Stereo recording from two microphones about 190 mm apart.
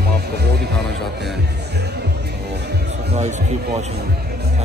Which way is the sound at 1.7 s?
60° right (ahead or behind).